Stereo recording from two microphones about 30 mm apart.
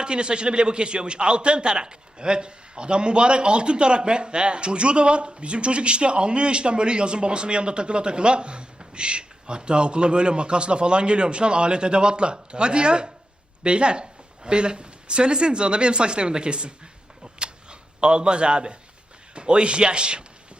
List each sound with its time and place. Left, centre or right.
0.0 s a man's voice: right
17.4 s a sound: right
19.3 s a man's voice: right